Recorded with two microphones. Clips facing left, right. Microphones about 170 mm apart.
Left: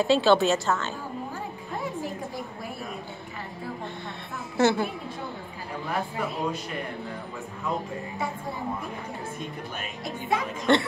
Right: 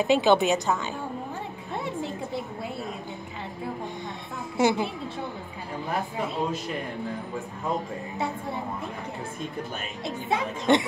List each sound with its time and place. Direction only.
0.0 s a woman's voice: 15° right (ahead or behind)
4.6 s a woman's voice: 10° right (ahead or behind)
10.0 s speech: 20° right (ahead or behind)